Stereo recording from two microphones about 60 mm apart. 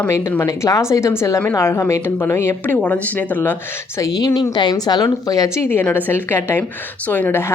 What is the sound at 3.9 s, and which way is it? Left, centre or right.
Speech, left.